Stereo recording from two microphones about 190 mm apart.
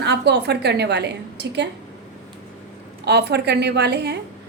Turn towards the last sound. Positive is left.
turn(degrees=-60)  # may be behind; listen again after turning